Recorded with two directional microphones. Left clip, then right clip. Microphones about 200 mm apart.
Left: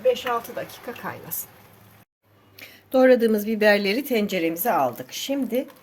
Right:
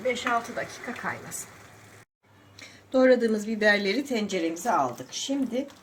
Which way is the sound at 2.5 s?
45° left (ahead or behind).